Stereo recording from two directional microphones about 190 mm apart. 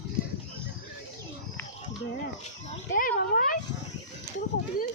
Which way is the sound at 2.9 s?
45° left (ahead or behind).